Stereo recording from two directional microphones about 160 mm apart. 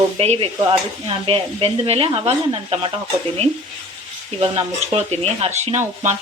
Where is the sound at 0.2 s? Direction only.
35° right (ahead or behind).